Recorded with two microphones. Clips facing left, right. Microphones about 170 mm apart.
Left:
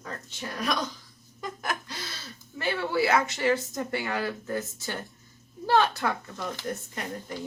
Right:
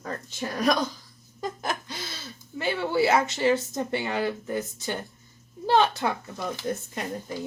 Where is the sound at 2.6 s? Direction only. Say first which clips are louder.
Right 2 dB; 25° right (ahead or behind).